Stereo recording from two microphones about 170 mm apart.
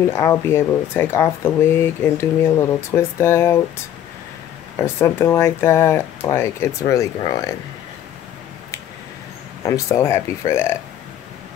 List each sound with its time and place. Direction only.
0.1 s speech: 15° left (ahead or behind)
4.7 s speech: 15° left (ahead or behind)
9.7 s speech: 20° left (ahead or behind)